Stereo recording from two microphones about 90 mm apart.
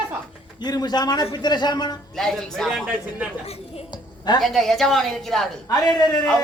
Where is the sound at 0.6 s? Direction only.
50° left (ahead or behind).